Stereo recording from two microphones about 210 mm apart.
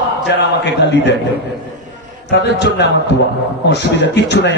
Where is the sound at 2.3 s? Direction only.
55° left (ahead or behind).